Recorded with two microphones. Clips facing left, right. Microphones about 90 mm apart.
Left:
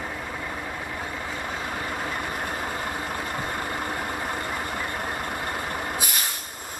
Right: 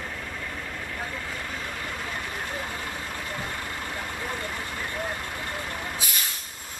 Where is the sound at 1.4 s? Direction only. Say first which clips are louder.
Left 4 dB; 30° left (ahead or behind); by 6.3 s 55° left (ahead or behind).